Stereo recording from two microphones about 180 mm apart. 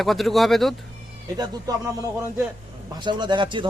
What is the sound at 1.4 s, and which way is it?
Speech, 20° right (ahead or behind).